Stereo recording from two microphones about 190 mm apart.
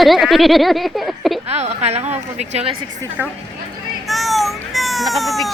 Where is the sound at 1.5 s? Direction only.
35° right (ahead or behind).